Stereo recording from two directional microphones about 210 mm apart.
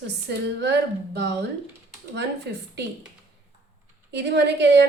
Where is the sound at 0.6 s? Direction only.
55° right (ahead or behind).